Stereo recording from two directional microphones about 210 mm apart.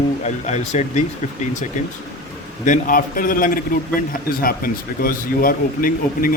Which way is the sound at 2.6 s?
40° left (ahead or behind).